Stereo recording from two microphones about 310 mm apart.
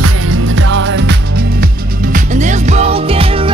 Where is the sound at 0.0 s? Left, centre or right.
Right.